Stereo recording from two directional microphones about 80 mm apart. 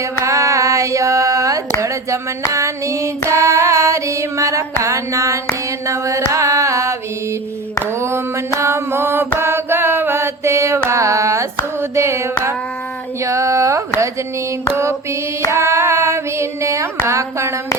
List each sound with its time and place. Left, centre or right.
0.3 s female singing: right
5.8 s a sound: right
7.9 s female singing: right
8.5 s mantra: right
11.8 s female singing: right
15.4 s female singing: right